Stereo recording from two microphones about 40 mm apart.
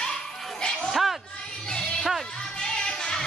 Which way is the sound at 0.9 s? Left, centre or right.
Centre.